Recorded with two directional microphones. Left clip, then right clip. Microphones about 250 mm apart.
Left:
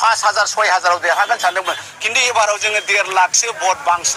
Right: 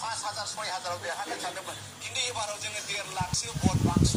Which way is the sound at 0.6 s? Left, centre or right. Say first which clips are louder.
Left 19 dB; left.